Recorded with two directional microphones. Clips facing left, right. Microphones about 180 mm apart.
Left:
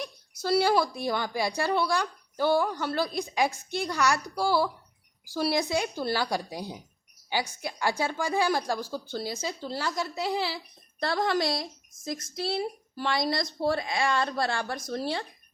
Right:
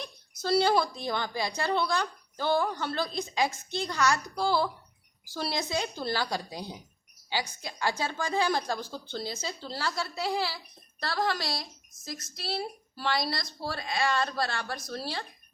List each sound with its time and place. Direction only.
0.0 s a woman's voice: 10° left (ahead or behind)